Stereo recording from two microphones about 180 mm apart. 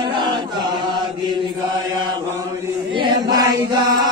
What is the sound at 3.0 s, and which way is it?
Chant, 20° right (ahead or behind).